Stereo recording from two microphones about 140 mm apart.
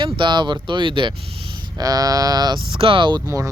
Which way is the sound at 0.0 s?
35° right (ahead or behind).